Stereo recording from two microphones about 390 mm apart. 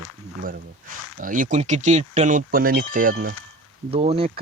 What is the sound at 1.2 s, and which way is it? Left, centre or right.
Speech, centre.